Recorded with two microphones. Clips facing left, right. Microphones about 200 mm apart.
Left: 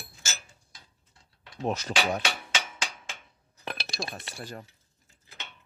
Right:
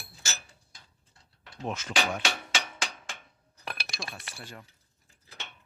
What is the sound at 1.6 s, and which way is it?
Speech, 35° left (ahead or behind).